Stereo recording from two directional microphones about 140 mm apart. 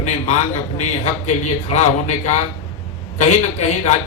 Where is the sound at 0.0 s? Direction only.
55° left (ahead or behind).